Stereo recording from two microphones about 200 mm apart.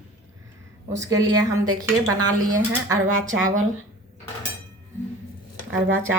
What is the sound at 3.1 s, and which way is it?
Speech, 90° right.